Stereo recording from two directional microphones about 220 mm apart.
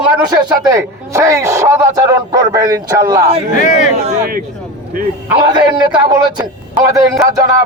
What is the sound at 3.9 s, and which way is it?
Speech, 30° right (ahead or behind).